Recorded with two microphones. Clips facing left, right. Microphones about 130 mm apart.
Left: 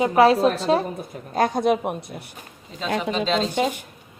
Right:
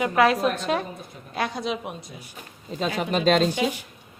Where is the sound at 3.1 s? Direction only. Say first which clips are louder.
Right 6 dB; 50° right (ahead or behind).